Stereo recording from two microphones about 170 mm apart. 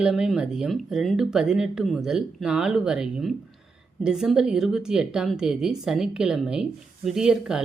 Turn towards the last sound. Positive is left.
turn(degrees=-5)  # may be behind; listen again after turning